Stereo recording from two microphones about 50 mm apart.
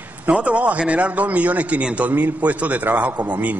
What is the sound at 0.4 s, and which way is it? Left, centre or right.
A man's voice, right.